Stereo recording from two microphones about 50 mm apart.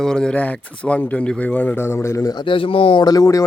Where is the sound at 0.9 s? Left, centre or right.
Left.